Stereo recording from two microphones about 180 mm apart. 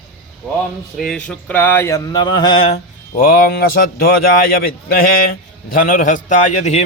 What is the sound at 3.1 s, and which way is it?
Speech, 55° left (ahead or behind).